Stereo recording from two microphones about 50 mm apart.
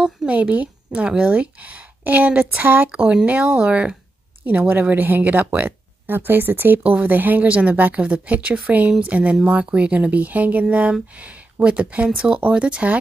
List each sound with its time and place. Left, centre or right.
0.3 s a woman's voice: right
2.9 s a woman's voice: right
6.8 s a woman's voice: right